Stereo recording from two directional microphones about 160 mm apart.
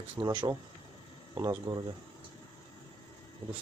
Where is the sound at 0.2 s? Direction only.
25° right (ahead or behind).